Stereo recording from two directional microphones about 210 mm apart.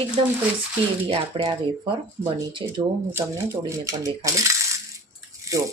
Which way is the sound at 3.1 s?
10° right (ahead or behind).